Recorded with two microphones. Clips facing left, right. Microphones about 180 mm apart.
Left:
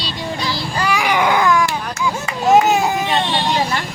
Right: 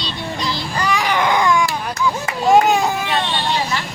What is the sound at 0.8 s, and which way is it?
Baby cry, 10° left (ahead or behind).